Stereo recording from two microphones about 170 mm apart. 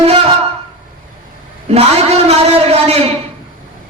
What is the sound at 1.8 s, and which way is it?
A man's voice, 40° right (ahead or behind).